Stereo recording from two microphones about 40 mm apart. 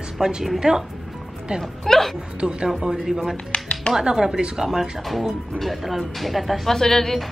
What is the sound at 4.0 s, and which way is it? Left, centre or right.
Speech, centre.